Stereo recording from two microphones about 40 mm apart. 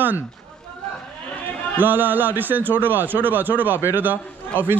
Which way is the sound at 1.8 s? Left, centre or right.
Right.